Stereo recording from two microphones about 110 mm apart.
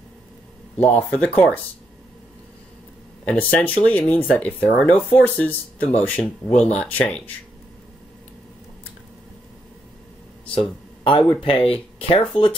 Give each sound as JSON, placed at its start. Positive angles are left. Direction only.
{"t": 0.7, "sound": "speech", "side_deg": 15}
{"t": 3.3, "sound": "speech", "side_deg": 15}
{"t": 10.5, "sound": "speech", "side_deg": 50}